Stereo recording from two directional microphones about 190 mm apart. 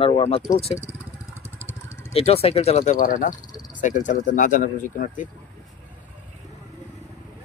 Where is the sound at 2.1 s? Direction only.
30° left (ahead or behind).